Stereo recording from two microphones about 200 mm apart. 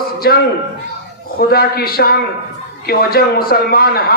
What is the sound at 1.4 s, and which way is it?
A man's voice, 50° left (ahead or behind).